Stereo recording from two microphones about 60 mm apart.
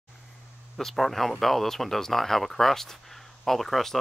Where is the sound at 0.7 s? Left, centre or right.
Centre.